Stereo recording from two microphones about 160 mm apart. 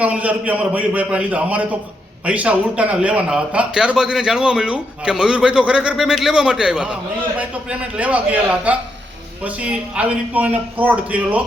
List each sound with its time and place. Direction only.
0.0 s a man's voice: 10° right (ahead or behind)